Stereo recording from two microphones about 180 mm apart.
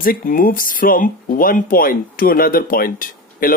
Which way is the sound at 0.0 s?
50° left (ahead or behind).